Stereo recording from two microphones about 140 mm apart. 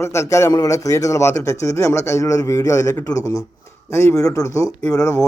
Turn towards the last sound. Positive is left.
turn(degrees=20)  # may be behind; listen again after turning